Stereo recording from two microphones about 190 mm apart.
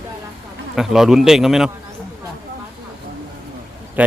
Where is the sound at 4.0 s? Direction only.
10° right (ahead or behind).